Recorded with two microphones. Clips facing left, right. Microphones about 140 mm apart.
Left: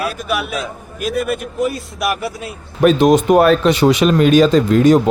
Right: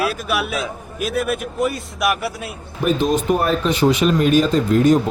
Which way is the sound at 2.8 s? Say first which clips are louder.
Left 7 dB; 80° left.